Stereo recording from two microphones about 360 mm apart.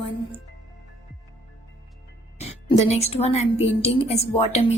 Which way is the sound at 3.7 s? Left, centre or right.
Centre.